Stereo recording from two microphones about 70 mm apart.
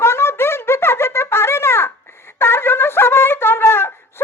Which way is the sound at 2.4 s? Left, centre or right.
Left.